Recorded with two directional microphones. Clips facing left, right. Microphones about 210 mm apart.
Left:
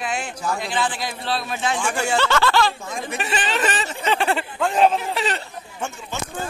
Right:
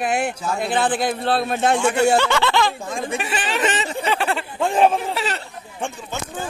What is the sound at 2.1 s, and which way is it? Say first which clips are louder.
Speech: right 1 dB; 15° right (ahead or behind).